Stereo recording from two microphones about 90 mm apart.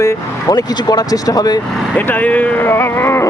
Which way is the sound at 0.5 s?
50° left (ahead or behind).